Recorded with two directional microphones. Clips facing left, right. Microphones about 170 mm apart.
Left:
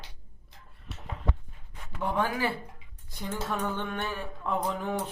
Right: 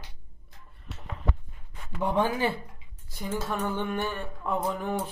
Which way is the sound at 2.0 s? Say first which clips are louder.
Right 3 dB; 20° right (ahead or behind).